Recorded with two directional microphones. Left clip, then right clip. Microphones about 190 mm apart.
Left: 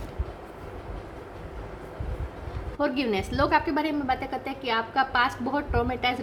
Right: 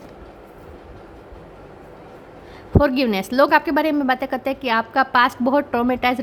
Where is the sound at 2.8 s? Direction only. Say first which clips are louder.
Right 8 dB; 40° right (ahead or behind).